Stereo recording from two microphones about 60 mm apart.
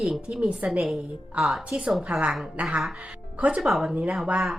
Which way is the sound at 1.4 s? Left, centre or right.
Right.